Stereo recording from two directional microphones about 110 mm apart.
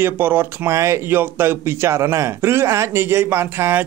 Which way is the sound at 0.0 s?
20° right (ahead or behind).